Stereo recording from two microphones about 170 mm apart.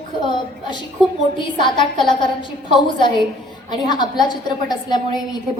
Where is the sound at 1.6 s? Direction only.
30° left (ahead or behind).